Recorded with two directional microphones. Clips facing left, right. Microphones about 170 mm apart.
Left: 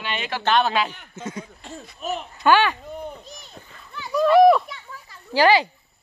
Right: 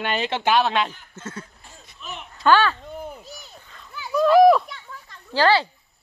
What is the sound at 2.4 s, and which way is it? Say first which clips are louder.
Speech: even; 15° left (ahead or behind).